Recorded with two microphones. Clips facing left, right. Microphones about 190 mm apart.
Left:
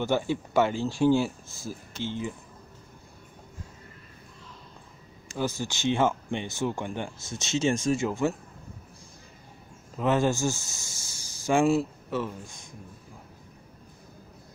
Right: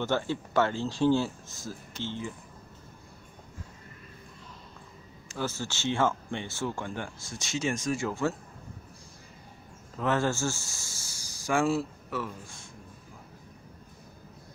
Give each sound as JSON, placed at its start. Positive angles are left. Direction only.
{"t": 0.0, "sound": "speech", "side_deg": 15}
{"t": 5.3, "sound": "speech", "side_deg": 15}
{"t": 9.9, "sound": "speech", "side_deg": 15}